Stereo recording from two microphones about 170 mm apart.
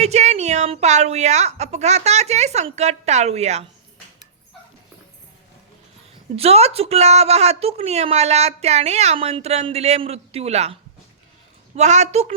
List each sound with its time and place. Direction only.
0.0 s a woman's voice: 40° right (ahead or behind)
6.3 s a woman's voice: 35° right (ahead or behind)